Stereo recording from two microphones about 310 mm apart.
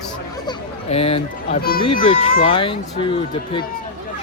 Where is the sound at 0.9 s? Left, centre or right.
Centre.